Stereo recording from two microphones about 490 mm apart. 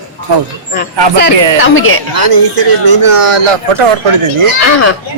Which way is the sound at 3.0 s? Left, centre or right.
Right.